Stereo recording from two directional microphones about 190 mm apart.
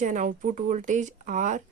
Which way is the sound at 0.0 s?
40° right (ahead or behind).